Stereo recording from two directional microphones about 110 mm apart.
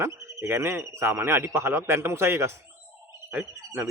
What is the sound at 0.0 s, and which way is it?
A man's voice, 30° right (ahead or behind).